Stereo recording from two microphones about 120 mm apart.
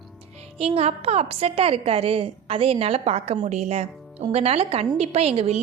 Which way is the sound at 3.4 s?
70° right (ahead or behind).